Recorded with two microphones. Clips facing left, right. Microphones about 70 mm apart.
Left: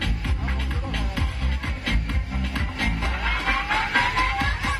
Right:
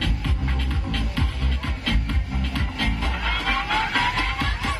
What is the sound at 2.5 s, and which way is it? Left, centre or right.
Music, left.